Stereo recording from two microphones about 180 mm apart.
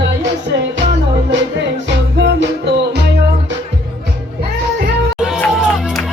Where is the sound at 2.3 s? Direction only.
70° right (ahead or behind).